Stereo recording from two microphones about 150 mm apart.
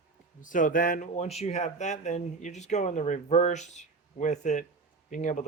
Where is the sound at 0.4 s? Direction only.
60° left (ahead or behind).